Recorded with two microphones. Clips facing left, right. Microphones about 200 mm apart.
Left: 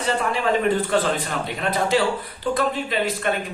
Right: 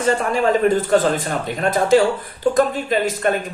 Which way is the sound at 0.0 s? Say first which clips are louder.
Right 5 dB; 45° right (ahead or behind).